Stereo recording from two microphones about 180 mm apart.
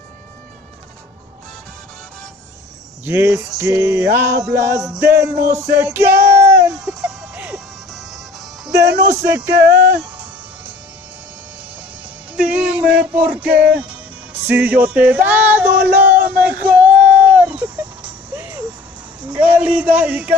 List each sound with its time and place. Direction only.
3.1 s music: 15° right (ahead or behind)
6.7 s music: centre (ahead or behind)
8.7 s speech: 70° right (ahead or behind)
9.2 s music: 15° right (ahead or behind)
12.4 s music: 5° right (ahead or behind)
14.4 s male singing: 10° right (ahead or behind)
19.2 s a man's voice: 10° right (ahead or behind)